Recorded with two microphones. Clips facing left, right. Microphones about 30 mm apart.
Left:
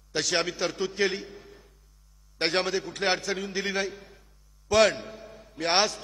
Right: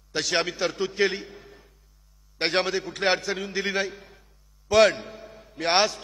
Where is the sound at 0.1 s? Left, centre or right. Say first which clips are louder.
Right 2 dB; centre.